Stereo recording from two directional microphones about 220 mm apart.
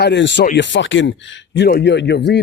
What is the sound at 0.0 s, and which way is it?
Speech, 55° left (ahead or behind).